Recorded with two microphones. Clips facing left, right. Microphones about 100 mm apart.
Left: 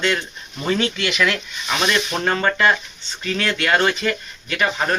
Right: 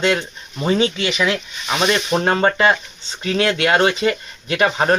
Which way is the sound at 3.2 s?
35° right (ahead or behind).